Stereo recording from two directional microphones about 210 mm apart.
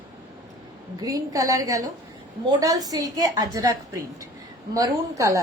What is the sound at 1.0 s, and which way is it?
A woman's voice, 15° right (ahead or behind).